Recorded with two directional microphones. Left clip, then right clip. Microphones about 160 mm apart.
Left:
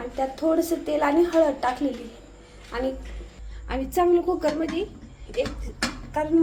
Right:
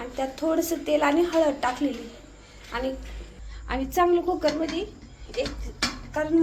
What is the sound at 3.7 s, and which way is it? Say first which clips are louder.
Speech: left 1 dB; 15° left (ahead or behind).